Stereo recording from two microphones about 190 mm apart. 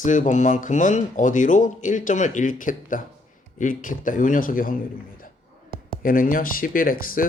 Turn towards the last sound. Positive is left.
turn(degrees=50)  # may be behind; listen again after turning